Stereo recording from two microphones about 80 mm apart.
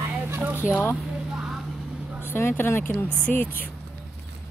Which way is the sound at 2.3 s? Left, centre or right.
Left.